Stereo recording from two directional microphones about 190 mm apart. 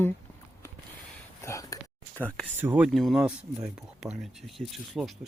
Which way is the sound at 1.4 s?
15° left (ahead or behind).